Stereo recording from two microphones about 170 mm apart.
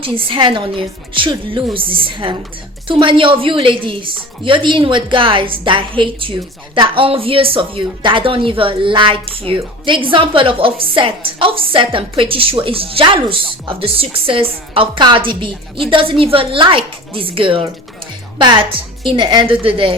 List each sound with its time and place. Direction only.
0.0 s a woman's voice: 30° right (ahead or behind)